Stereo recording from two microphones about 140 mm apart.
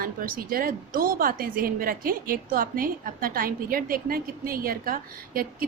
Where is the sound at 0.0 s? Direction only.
90° right.